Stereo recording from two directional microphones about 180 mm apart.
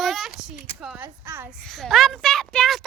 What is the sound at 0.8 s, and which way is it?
Speech, 5° right (ahead or behind).